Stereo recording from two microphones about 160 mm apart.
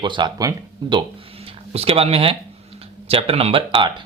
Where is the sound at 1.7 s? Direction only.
40° right (ahead or behind).